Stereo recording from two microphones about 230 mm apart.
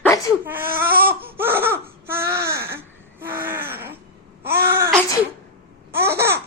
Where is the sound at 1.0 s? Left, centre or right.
Centre.